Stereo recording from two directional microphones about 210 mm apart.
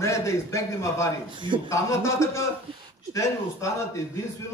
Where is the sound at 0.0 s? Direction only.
15° left (ahead or behind).